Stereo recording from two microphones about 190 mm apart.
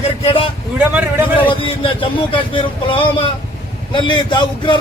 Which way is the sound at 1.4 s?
25° left (ahead or behind).